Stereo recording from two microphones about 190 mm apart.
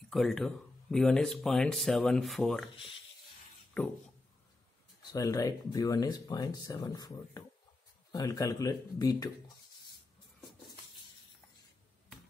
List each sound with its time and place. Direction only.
0.1 s speech: centre (ahead or behind)
2.7 s speech: 25° left (ahead or behind)
3.8 s a sound: 5° left (ahead or behind)
5.1 s speech: 20° left (ahead or behind)